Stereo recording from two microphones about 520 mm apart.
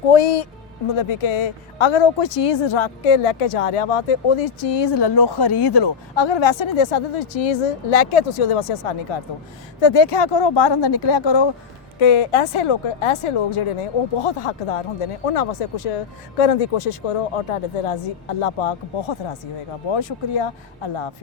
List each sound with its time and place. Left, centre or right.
0.1 s speech: left
9.8 s speech: left
15.3 s speech: left